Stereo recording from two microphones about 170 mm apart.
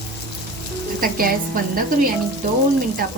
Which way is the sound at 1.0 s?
60° right (ahead or behind).